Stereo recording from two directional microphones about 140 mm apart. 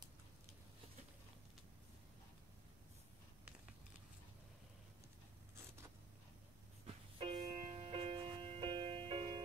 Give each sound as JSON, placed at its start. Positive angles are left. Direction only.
{"t": 7.2, "sound": "music", "side_deg": -40}